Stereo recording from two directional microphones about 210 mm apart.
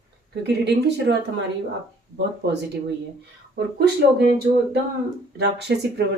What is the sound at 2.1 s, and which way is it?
Speech, 50° right (ahead or behind).